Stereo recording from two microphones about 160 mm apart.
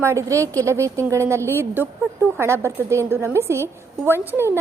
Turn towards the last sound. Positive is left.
turn(degrees=-15)  # may be behind; listen again after turning